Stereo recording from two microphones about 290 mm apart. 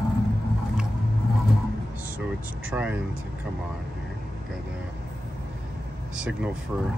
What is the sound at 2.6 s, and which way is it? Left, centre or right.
Speech, centre.